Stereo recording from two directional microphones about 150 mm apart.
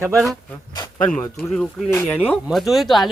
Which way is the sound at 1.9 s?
15° left (ahead or behind).